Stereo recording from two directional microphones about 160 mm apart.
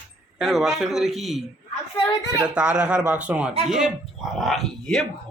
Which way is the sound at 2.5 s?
10° right (ahead or behind).